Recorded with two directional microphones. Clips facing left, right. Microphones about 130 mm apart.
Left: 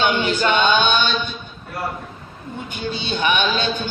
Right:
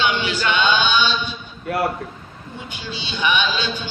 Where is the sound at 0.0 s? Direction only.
50° left (ahead or behind).